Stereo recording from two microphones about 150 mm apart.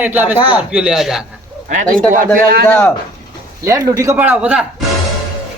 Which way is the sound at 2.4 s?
90° right.